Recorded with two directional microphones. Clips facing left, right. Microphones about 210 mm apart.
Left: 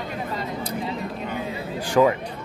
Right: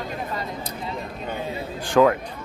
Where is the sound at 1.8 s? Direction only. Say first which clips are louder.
Right 1 dB; 5° left (ahead or behind).